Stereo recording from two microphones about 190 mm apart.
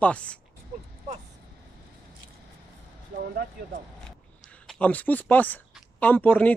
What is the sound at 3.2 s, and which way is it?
Speech, 55° right (ahead or behind).